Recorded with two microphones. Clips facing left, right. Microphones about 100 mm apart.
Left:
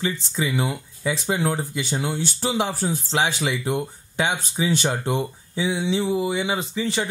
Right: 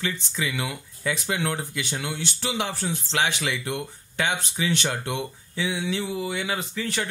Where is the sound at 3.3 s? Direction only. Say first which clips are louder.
Left 4 dB; 5° left (ahead or behind).